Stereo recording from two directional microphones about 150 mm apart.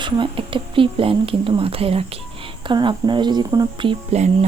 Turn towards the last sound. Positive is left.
turn(degrees=-35)  # may be behind; listen again after turning